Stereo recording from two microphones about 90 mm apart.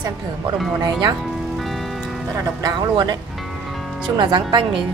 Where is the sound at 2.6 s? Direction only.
45° right (ahead or behind).